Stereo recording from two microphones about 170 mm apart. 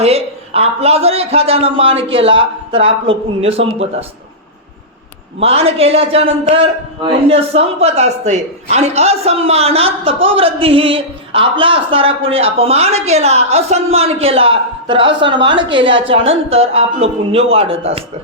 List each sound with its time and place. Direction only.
0.0 s a man's voice: 35° right (ahead or behind)
5.4 s a man's voice: 35° right (ahead or behind)